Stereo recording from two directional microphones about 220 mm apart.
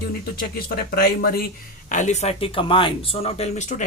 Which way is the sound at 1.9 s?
35° left (ahead or behind).